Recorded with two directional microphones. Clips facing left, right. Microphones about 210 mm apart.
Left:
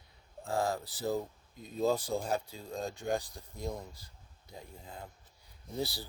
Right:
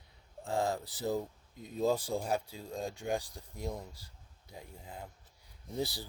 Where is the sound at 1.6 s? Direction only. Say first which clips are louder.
Even; 15° right (ahead or behind).